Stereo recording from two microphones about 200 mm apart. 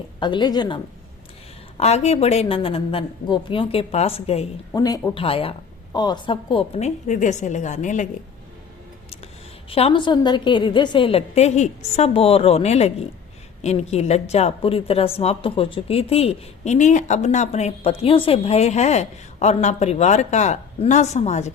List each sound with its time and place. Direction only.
0.2 s speech: 20° left (ahead or behind)
1.8 s speech: 30° left (ahead or behind)
4.7 s speech: 20° left (ahead or behind); by 8.0 s 40° left (ahead or behind)
9.6 s speech: 30° left (ahead or behind)